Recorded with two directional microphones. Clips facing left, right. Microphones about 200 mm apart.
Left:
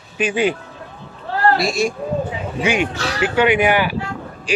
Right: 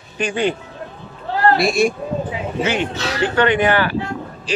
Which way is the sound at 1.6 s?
55° right (ahead or behind).